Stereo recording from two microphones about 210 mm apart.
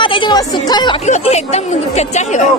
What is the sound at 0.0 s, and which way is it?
Speech, 25° left (ahead or behind).